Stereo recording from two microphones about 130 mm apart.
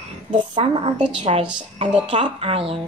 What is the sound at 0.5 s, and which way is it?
A woman's voice, 40° right (ahead or behind).